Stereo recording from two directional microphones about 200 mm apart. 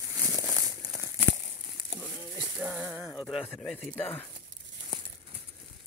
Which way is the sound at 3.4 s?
10° left (ahead or behind).